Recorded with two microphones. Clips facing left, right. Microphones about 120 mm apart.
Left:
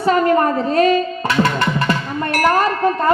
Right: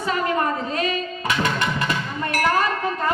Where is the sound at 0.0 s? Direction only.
45° left (ahead or behind).